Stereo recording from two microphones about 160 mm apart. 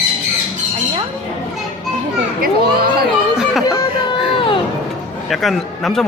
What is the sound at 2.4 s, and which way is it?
Speech, 70° right (ahead or behind).